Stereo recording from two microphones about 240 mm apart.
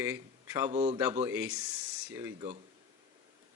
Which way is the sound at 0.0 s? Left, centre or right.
Centre.